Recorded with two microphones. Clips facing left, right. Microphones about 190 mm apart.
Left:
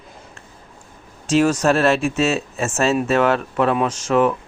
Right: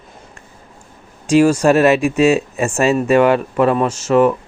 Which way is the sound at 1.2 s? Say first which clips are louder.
Right 5 dB; 10° right (ahead or behind).